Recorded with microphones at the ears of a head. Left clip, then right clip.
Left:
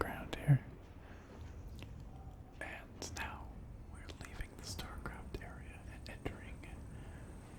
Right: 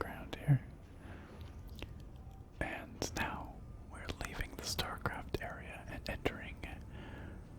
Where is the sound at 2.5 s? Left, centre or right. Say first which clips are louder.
Right 6 dB; right.